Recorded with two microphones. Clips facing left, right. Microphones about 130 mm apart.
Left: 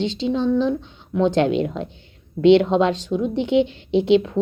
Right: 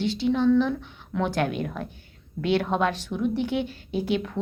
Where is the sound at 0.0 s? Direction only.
20° left (ahead or behind).